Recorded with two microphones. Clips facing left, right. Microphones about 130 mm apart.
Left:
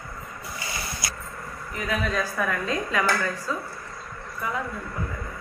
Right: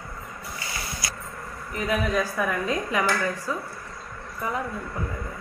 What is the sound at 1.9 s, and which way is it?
A woman's voice, 15° right (ahead or behind).